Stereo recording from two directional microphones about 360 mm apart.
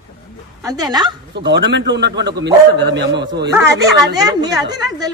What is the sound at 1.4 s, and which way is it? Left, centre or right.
A man's voice, right.